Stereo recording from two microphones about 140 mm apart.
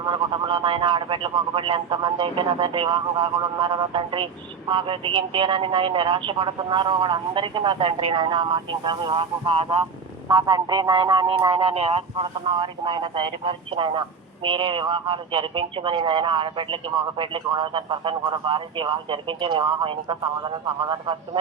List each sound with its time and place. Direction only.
0.0 s speech: 35° right (ahead or behind)
10.2 s speech: 30° right (ahead or behind)